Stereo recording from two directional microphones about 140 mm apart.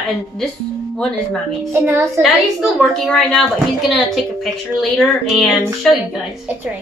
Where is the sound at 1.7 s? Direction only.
15° right (ahead or behind).